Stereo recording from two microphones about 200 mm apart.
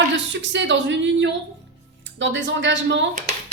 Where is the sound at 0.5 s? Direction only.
65° right (ahead or behind).